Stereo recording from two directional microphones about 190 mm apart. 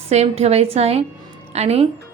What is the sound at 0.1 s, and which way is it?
Speech, 35° right (ahead or behind).